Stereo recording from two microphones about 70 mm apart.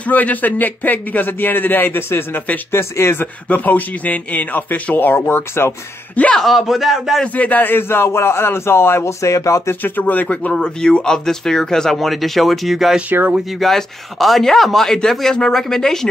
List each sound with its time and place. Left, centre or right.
0.0 s speech: left
2.8 s speech: left
3.4 s speech: left
6.1 s speech: centre
6.4 s a man's voice: centre
7.3 s speech: left
9.8 s speech: left
10.2 s a man's voice: centre